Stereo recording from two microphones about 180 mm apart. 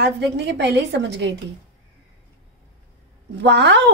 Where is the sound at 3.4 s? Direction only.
75° right (ahead or behind).